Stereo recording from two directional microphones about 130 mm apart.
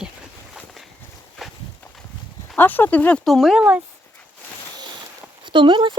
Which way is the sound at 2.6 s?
15° left (ahead or behind).